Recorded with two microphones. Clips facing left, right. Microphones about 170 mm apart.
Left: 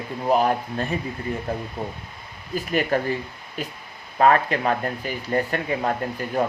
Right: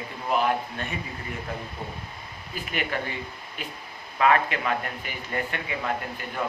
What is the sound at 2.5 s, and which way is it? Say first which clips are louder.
Speech: left 8 dB; 40° left (ahead or behind).